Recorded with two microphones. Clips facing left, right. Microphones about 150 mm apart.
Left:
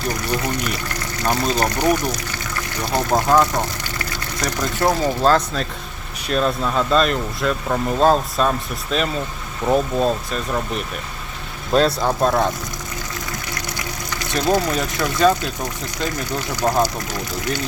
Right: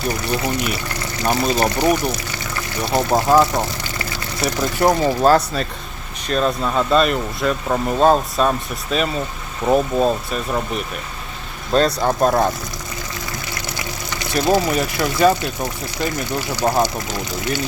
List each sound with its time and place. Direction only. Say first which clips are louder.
0.1 s speech: right 1 dB; 10° right (ahead or behind)
2.9 s speech: right 2 dB; 5° right (ahead or behind)
6.2 s speech: right 1 dB; centre (ahead or behind)
11.9 s speech: right 2 dB; 5° right (ahead or behind)
14.3 s speech: right 2 dB; 5° right (ahead or behind)